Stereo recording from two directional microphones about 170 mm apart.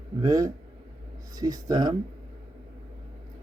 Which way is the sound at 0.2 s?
20° right (ahead or behind).